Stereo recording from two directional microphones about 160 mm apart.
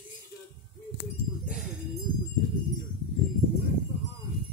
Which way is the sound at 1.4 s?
5° right (ahead or behind).